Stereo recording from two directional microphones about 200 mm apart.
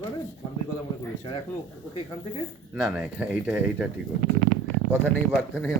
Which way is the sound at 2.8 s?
5° right (ahead or behind).